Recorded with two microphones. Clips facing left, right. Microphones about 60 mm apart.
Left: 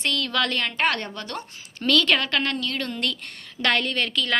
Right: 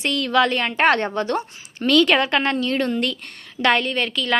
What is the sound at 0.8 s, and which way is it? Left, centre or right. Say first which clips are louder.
A woman's voice: right 10 dB; right.